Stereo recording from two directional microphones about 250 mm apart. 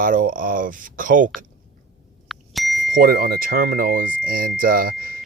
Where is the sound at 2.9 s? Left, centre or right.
Right.